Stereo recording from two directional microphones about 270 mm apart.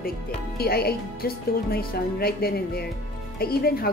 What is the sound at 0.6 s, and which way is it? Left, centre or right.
A woman's voice, left.